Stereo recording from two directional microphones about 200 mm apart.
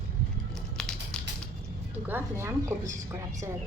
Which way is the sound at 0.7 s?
5° left (ahead or behind).